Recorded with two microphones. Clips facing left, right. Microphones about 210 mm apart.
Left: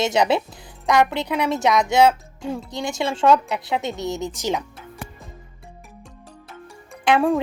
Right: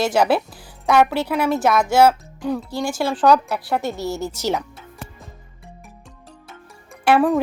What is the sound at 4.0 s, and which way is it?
Speech, 20° left (ahead or behind).